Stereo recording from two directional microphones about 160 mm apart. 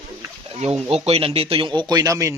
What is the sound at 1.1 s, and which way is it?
Speech, 35° right (ahead or behind).